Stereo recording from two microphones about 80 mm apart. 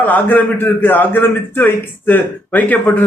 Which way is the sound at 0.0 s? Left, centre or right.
Left.